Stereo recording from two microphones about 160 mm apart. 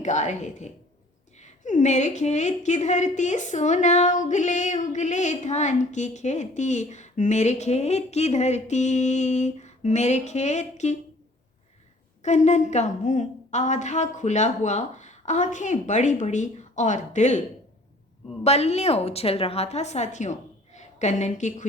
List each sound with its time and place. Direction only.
0.0 s a woman's voice: 50° left (ahead or behind)
12.2 s a woman's voice: 45° left (ahead or behind)
18.4 s a woman's voice: 40° left (ahead or behind)